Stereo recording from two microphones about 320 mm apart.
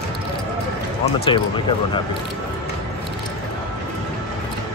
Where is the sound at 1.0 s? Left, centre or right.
Centre.